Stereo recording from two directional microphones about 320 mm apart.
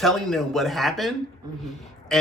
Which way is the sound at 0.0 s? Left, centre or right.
Centre.